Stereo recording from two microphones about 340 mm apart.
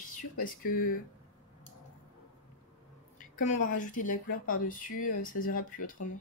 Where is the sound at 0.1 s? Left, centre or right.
Left.